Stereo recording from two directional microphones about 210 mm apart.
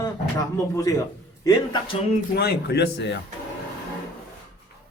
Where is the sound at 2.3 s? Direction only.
50° left (ahead or behind).